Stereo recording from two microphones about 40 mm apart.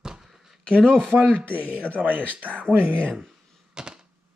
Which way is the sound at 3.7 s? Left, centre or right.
Centre.